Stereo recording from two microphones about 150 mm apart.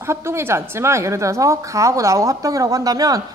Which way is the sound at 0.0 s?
15° right (ahead or behind).